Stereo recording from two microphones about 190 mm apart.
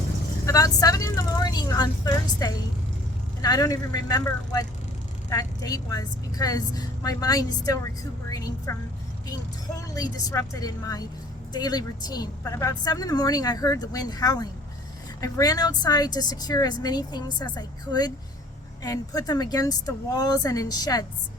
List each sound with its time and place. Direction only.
0.4 s speech: 20° left (ahead or behind)
9.9 s speech: 20° left (ahead or behind)